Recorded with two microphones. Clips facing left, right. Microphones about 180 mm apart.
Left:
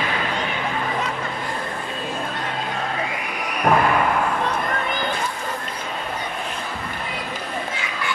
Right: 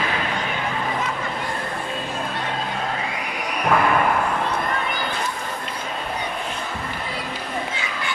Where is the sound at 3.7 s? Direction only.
60° left (ahead or behind).